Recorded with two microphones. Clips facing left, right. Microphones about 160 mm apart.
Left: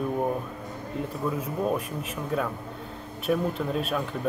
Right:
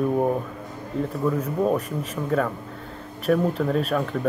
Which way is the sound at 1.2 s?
5° left (ahead or behind).